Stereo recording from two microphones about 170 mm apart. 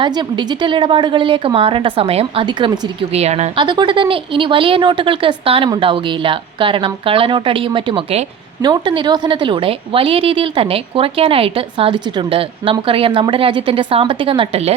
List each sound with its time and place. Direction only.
0.0 s a woman's voice: 25° right (ahead or behind)
3.2 s a woman's voice: 40° right (ahead or behind)